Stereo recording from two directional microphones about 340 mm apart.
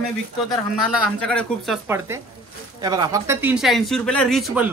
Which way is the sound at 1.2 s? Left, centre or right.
Centre.